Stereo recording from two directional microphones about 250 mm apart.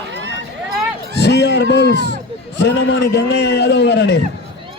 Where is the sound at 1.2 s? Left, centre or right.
Left.